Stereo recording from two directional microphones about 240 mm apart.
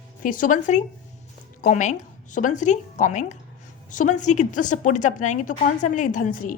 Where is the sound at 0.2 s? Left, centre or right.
Left.